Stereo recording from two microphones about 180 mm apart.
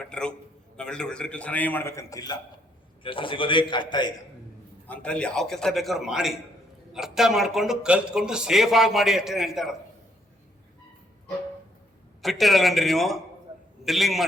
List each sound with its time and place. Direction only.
0.1 s a man's voice: 5° left (ahead or behind); by 4.1 s 25° left (ahead or behind)
4.9 s speech: 5° left (ahead or behind)
12.2 s speech: centre (ahead or behind)